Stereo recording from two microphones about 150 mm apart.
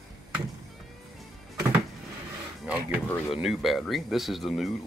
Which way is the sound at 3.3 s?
Centre (ahead or behind).